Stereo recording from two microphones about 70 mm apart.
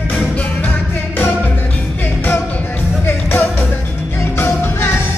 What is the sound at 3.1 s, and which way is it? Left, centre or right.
Music, left.